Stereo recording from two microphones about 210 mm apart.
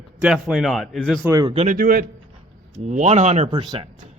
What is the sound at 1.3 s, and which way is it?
Speech, 15° right (ahead or behind).